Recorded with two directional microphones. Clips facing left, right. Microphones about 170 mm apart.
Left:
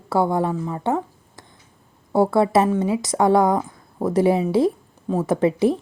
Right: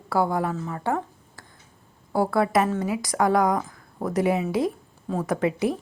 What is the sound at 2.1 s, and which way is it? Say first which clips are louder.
Speech: left 5 dB; 25° left (ahead or behind).